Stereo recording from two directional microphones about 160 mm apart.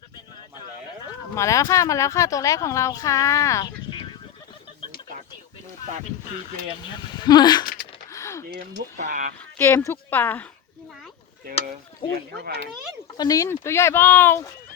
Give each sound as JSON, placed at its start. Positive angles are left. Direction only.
{"t": 1.4, "sound": "speech", "side_deg": 20}
{"t": 7.0, "sound": "speech", "side_deg": 25}
{"t": 7.6, "sound": "a sound", "side_deg": 60}
{"t": 8.1, "sound": "a sound", "side_deg": 20}
{"t": 9.0, "sound": "speech", "side_deg": -50}
{"t": 9.6, "sound": "speech", "side_deg": 15}
{"t": 12.0, "sound": "speech", "side_deg": 30}